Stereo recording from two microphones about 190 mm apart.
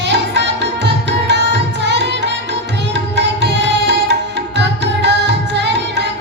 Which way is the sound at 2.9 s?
65° right (ahead or behind).